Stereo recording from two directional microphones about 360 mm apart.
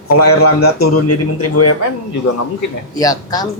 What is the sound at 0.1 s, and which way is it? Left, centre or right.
A man's voice, left.